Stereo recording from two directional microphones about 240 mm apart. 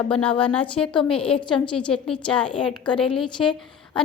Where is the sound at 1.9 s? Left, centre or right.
Centre.